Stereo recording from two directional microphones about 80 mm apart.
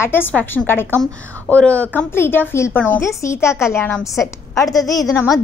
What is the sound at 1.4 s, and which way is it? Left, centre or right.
Speech, centre.